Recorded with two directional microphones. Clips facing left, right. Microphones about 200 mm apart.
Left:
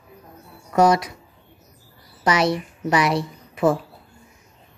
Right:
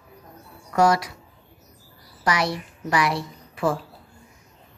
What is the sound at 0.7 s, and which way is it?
Speech, 20° left (ahead or behind).